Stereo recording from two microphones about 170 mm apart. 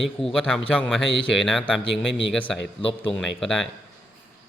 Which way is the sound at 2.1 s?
90° left.